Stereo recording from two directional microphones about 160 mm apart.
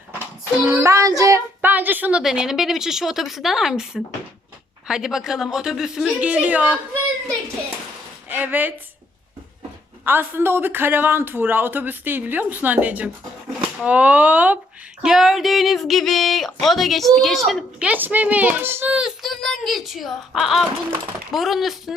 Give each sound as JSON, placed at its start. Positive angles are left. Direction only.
{"t": 0.8, "sound": "a woman's voice", "side_deg": -20}
{"t": 8.3, "sound": "speech", "side_deg": -10}
{"t": 10.0, "sound": "a woman's voice", "side_deg": -10}